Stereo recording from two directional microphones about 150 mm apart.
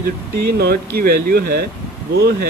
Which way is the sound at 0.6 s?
90° right.